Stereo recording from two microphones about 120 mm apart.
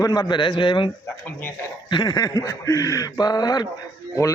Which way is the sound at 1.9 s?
35° left (ahead or behind).